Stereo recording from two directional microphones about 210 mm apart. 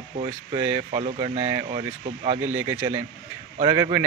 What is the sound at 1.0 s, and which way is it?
Speech, 30° right (ahead or behind).